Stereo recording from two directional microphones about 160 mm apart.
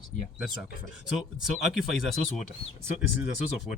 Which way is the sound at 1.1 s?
Centre (ahead or behind).